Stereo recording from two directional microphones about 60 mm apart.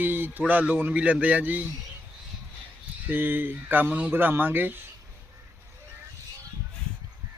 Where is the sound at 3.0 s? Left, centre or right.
Right.